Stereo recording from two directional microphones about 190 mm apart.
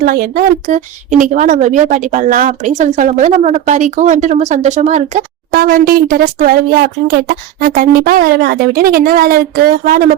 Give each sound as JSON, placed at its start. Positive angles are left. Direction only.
{"t": 0.0, "sound": "a woman's voice", "side_deg": -50}